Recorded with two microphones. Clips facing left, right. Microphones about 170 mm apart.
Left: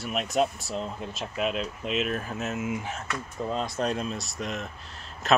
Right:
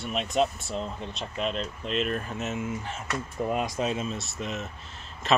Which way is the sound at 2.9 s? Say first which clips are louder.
Right 2 dB; centre (ahead or behind).